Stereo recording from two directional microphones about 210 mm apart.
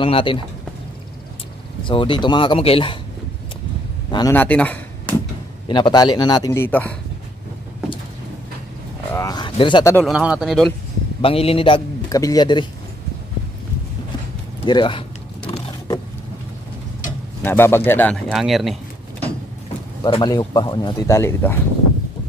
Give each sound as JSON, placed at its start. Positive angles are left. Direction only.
{"t": 0.0, "sound": "a man's voice", "side_deg": 25}
{"t": 1.9, "sound": "a man's voice", "side_deg": 25}
{"t": 4.1, "sound": "speech", "side_deg": 15}
{"t": 5.7, "sound": "a man's voice", "side_deg": 20}
{"t": 9.1, "sound": "a sound", "side_deg": 15}
{"t": 9.9, "sound": "speech", "side_deg": 0}
{"t": 11.1, "sound": "a man's voice", "side_deg": 25}
{"t": 14.6, "sound": "power windows", "side_deg": 20}
{"t": 17.4, "sound": "speech", "side_deg": 10}
{"t": 20.0, "sound": "a man's voice", "side_deg": 20}